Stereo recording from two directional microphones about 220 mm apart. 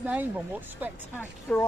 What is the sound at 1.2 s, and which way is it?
Speech, 10° left (ahead or behind).